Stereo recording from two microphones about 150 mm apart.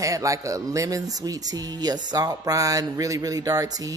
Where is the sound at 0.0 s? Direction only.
20° right (ahead or behind).